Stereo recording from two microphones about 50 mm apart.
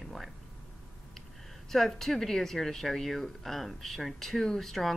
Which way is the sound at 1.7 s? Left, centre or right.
Centre.